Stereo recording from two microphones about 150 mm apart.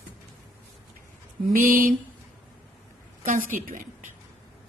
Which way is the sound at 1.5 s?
70° right (ahead or behind).